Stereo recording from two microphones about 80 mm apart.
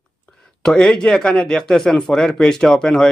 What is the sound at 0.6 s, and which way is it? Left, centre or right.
Speech, centre.